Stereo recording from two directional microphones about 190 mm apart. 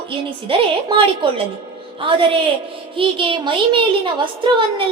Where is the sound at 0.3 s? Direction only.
25° right (ahead or behind).